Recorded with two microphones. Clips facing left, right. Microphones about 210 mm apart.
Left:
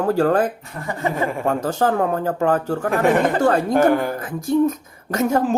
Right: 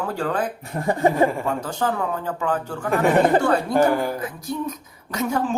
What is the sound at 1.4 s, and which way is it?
Speech, 45° left (ahead or behind).